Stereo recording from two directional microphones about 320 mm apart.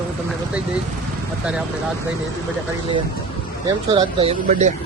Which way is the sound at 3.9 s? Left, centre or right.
Centre.